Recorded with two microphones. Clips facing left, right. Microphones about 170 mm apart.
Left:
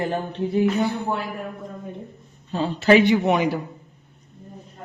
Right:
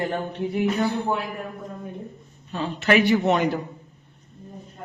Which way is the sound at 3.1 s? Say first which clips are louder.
Left 1 dB; 15° left (ahead or behind).